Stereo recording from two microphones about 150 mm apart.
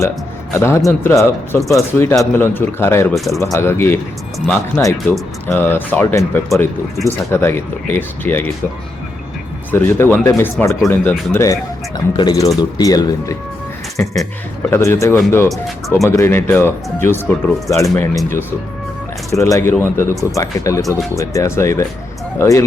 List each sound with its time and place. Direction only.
0.5 s speech: 15° left (ahead or behind)
9.7 s speech: 15° left (ahead or behind)
19.4 s speech: 20° left (ahead or behind)